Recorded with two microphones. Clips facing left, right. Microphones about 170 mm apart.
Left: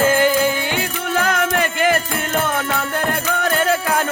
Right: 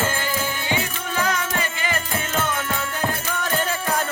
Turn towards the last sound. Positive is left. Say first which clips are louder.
# left 6 dB
turn(degrees=65)  # may be behind; listen again after turning